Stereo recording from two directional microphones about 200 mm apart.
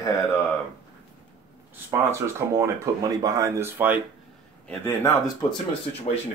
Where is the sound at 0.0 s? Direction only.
10° left (ahead or behind).